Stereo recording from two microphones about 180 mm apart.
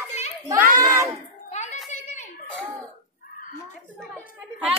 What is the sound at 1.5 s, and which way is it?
Hands, 40° left (ahead or behind).